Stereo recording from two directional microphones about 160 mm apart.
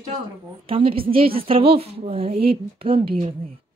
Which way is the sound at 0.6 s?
35° right (ahead or behind).